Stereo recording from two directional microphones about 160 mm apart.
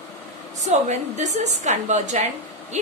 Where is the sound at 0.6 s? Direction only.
45° right (ahead or behind).